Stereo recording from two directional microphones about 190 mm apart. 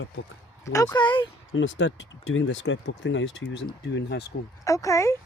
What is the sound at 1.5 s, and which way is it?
Speech, 80° left.